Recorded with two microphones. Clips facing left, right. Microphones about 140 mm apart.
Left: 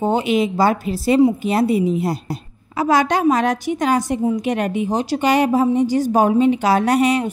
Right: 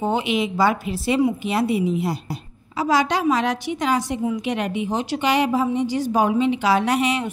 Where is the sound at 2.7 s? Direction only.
55° left (ahead or behind).